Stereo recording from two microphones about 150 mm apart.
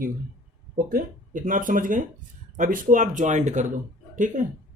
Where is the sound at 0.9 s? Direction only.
65° right (ahead or behind).